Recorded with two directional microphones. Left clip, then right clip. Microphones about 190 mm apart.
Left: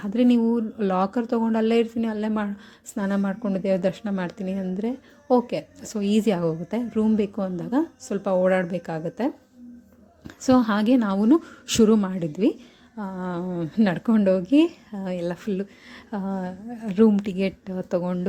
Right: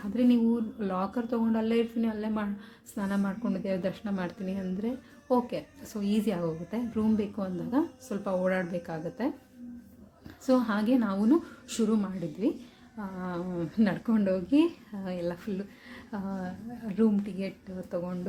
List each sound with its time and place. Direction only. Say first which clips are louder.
0.0 s a woman's voice: left 6 dB; 40° left (ahead or behind)
10.4 s a woman's voice: left 7 dB; 40° left (ahead or behind)